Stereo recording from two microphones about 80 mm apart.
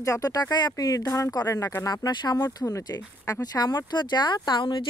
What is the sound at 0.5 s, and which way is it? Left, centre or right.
Speech, left.